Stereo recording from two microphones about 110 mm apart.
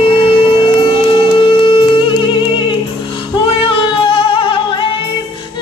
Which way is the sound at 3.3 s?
55° left (ahead or behind).